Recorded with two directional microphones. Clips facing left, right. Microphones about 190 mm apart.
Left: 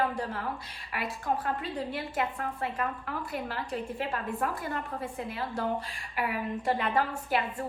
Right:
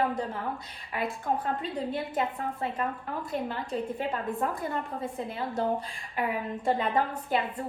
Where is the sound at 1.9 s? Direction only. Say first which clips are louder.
Right 2 dB; 25° right (ahead or behind).